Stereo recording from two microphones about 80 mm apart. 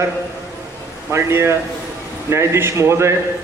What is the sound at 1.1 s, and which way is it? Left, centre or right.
A man's voice, right.